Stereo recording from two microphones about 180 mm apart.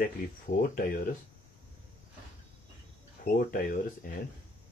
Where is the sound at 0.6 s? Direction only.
55° left (ahead or behind).